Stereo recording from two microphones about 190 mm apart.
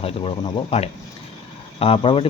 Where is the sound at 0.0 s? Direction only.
30° left (ahead or behind).